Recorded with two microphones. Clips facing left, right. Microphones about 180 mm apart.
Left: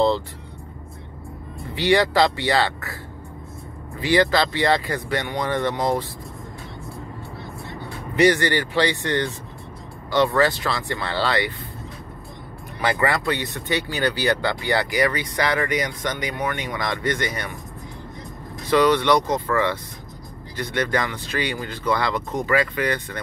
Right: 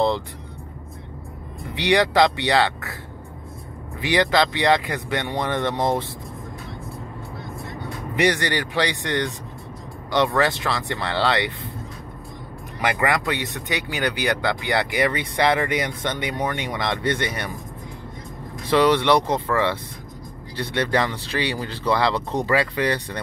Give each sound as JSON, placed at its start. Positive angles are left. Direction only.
{"t": 1.8, "sound": "speech", "side_deg": -20}
{"t": 4.0, "sound": "speech", "side_deg": -20}
{"t": 8.2, "sound": "speech", "side_deg": -15}
{"t": 13.0, "sound": "speech", "side_deg": -15}
{"t": 18.8, "sound": "speech", "side_deg": -25}